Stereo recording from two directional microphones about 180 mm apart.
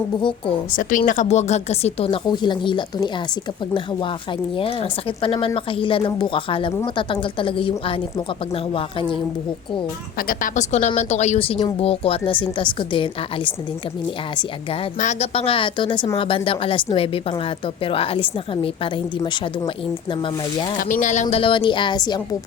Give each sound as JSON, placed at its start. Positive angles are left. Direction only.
{"t": 0.2, "sound": "speech", "side_deg": 30}
{"t": 0.7, "sound": "a woman's voice", "side_deg": 50}
{"t": 4.5, "sound": "a woman's voice", "side_deg": 30}
{"t": 10.2, "sound": "a woman's voice", "side_deg": 50}
{"t": 14.9, "sound": "speech", "side_deg": 40}
{"t": 20.7, "sound": "speech", "side_deg": 50}